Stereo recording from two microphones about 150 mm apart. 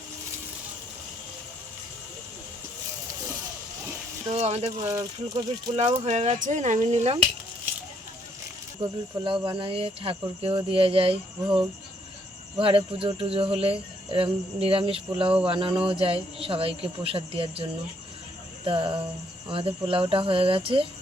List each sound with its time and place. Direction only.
4.3 s speech: 45° right (ahead or behind)
4.9 s speech: 25° right (ahead or behind)
5.7 s speech: 45° right (ahead or behind)
8.8 s speech: 35° right (ahead or behind)